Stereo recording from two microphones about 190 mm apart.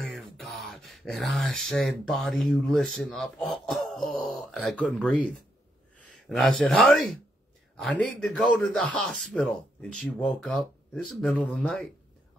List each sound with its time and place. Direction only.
0.0 s speech: centre (ahead or behind)